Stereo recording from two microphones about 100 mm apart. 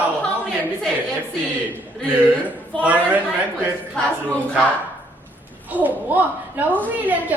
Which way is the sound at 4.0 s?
10° left (ahead or behind).